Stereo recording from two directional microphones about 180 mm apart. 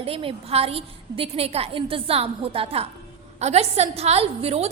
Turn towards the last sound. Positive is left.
turn(degrees=-35)  # may be behind; listen again after turning